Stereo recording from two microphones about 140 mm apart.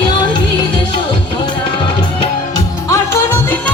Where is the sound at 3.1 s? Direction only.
15° left (ahead or behind).